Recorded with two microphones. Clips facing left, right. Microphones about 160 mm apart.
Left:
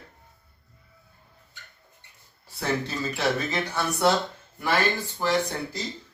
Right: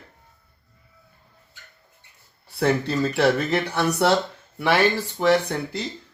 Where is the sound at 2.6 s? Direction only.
65° right (ahead or behind).